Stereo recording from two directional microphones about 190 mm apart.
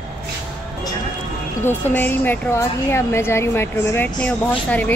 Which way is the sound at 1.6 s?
10° left (ahead or behind).